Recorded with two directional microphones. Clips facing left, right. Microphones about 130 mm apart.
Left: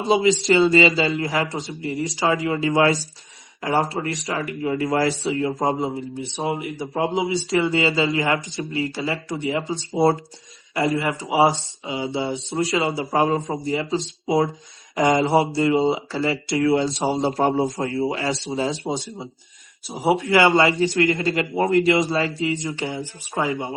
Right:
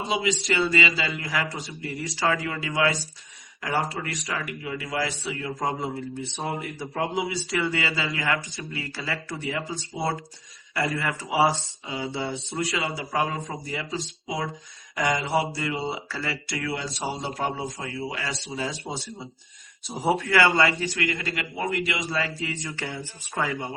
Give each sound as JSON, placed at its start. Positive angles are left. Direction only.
{"t": 0.1, "sound": "speech", "side_deg": 30}
{"t": 5.2, "sound": "speech", "side_deg": 30}
{"t": 5.9, "sound": "speech", "side_deg": 15}
{"t": 10.8, "sound": "speech", "side_deg": 25}
{"t": 12.5, "sound": "speech", "side_deg": 30}